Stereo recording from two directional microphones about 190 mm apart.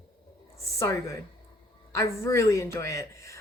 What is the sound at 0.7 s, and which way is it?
A woman's voice, 15° left (ahead or behind).